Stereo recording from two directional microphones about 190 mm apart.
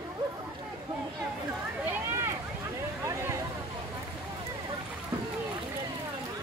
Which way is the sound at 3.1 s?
15° right (ahead or behind).